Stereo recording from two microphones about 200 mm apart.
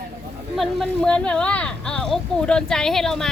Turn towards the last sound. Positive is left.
turn(degrees=0)  # may be behind; listen again after turning